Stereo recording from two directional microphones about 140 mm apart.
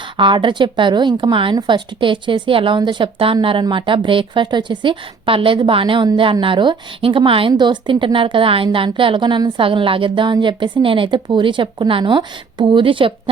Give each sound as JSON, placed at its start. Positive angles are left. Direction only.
{"t": 0.2, "sound": "a woman's voice", "side_deg": -35}